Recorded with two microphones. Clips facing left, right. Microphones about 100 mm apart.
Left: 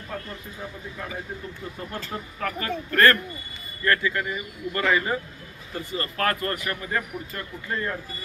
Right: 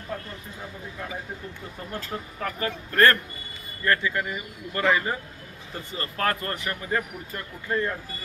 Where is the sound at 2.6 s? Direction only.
20° right (ahead or behind).